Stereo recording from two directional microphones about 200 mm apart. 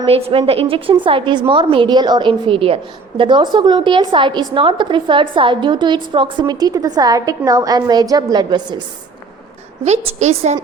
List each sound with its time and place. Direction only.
0.0 s a woman's voice: 30° right (ahead or behind)
9.8 s a woman's voice: 35° right (ahead or behind)